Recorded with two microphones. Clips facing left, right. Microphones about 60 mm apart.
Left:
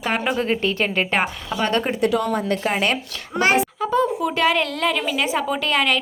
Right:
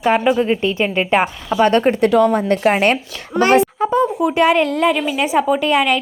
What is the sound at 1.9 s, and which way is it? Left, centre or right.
Speech, right.